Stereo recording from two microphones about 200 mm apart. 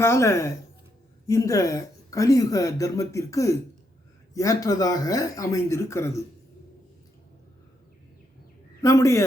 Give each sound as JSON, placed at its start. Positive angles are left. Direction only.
{"t": 0.0, "sound": "speech", "side_deg": 15}
{"t": 8.8, "sound": "speech", "side_deg": 15}